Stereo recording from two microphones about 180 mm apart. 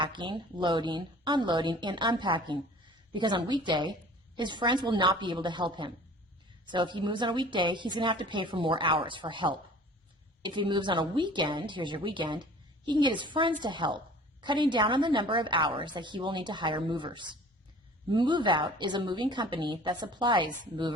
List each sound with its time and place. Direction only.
0.0 s a woman's voice: 25° right (ahead or behind)